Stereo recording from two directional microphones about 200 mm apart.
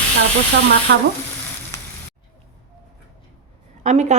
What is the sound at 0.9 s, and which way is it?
Frying, 55° right (ahead or behind).